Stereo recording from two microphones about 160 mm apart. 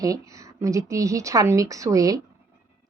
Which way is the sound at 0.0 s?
20° right (ahead or behind).